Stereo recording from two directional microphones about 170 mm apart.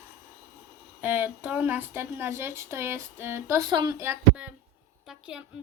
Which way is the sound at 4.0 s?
10° right (ahead or behind).